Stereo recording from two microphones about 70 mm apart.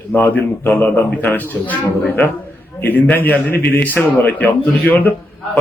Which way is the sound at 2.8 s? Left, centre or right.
Left.